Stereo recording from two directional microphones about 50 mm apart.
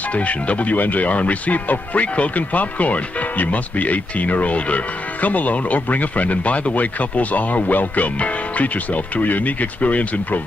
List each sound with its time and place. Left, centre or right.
0.1 s speech: left